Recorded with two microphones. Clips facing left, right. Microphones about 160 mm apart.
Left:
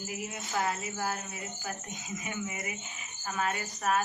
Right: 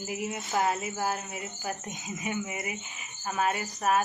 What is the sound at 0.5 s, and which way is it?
Speech, 20° right (ahead or behind).